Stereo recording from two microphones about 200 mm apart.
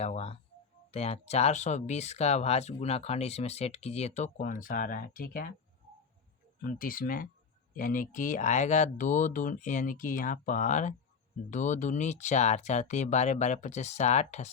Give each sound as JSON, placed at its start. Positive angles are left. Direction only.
{"t": 0.0, "sound": "speech", "side_deg": 30}
{"t": 6.6, "sound": "speech", "side_deg": 45}